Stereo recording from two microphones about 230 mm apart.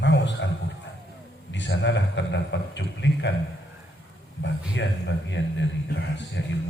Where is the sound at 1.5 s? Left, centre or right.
Left.